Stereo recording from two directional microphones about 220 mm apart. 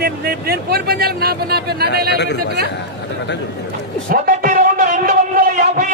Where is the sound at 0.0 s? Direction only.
45° right (ahead or behind).